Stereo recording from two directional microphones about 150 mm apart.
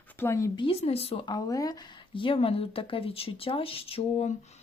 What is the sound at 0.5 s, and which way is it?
Speech, 35° left (ahead or behind).